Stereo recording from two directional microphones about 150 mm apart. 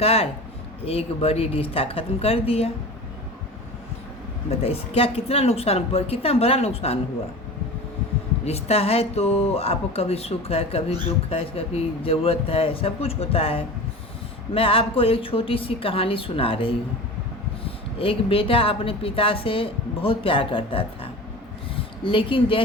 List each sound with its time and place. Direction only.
0.0 s a woman's voice: 40° left (ahead or behind)
4.4 s a woman's voice: 40° left (ahead or behind)
8.4 s a woman's voice: 45° left (ahead or behind)
18.0 s a woman's voice: 40° left (ahead or behind)